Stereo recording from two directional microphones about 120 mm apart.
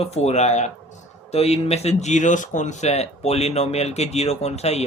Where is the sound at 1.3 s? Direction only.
60° left (ahead or behind).